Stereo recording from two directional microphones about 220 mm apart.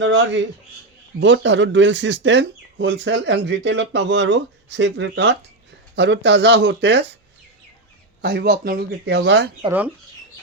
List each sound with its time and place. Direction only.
0.0 s speech: 55° right (ahead or behind)
8.2 s speech: 45° right (ahead or behind)